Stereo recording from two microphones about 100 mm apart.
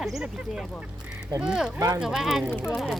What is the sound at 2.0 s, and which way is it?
Speech, 5° right (ahead or behind).